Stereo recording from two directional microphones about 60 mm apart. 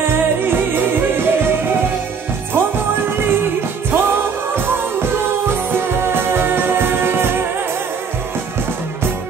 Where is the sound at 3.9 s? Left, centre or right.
Right.